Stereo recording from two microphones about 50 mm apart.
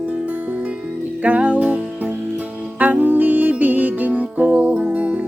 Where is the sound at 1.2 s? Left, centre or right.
Right.